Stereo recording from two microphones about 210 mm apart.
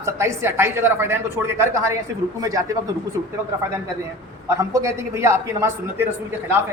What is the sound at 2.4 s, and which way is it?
Speech, 15° right (ahead or behind).